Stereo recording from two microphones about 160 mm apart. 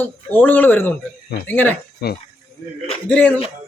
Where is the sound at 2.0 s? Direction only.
90° left.